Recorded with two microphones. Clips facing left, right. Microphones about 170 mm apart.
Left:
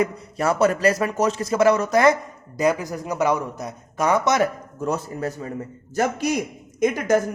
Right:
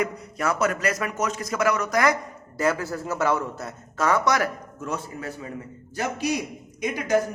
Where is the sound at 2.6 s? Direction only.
15° left (ahead or behind).